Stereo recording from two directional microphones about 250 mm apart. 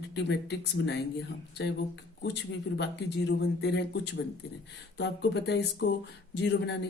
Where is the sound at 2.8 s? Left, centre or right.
Left.